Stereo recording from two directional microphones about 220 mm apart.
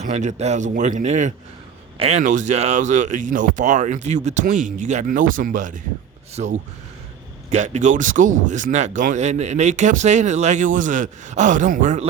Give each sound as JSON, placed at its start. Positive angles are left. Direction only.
{"t": 0.0, "sound": "speech", "side_deg": -35}